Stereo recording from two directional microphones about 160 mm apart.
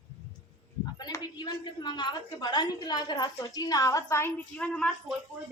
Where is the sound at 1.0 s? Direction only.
25° left (ahead or behind).